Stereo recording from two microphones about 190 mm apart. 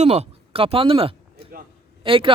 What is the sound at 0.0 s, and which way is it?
Speech, 35° right (ahead or behind).